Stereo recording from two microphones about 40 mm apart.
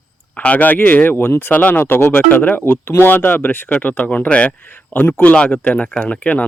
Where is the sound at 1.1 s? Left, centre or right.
Left.